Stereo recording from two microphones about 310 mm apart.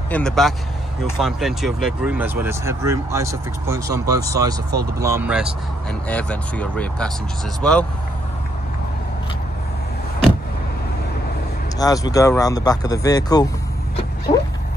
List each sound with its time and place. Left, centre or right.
0.1 s speech: centre
11.8 s speech: centre
14.3 s vehicle: centre